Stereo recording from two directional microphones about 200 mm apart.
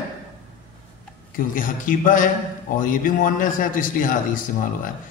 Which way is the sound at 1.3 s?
45° left (ahead or behind).